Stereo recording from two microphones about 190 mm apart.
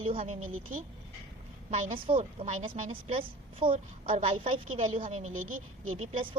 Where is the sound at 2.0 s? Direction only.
30° right (ahead or behind).